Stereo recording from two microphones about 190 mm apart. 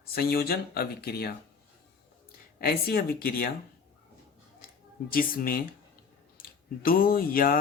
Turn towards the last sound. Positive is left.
turn(degrees=50)  # may be behind; listen again after turning